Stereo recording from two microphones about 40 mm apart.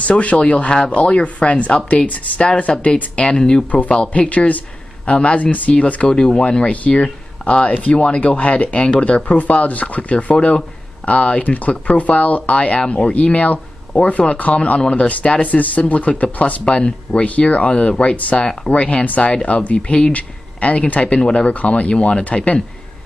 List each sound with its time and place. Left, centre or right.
0.0 s speech: left
2.0 s speech: left
2.7 s speech: left
6.0 s speech: left
14.8 s speech: left
15.0 s speech: left
16.6 s speech: left